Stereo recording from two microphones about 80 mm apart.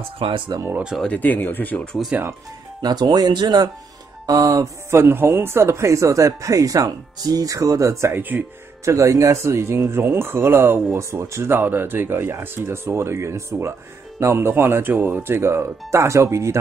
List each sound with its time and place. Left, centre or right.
0.5 s speech: right
1.0 s speech: centre
2.1 s speech: centre
2.8 s speech: right
4.3 s speech: right
4.9 s speech: right
8.2 s speech: right
8.8 s speech: right